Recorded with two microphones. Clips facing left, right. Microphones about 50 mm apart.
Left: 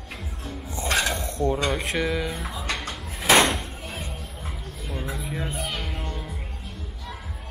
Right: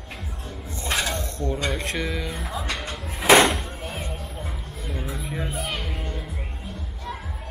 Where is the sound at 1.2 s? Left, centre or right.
Left.